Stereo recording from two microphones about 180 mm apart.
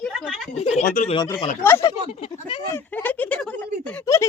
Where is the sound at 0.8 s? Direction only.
50° left (ahead or behind).